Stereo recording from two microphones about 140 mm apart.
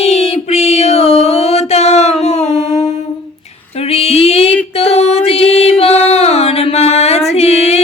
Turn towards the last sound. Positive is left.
turn(degrees=50)  # may be behind; listen again after turning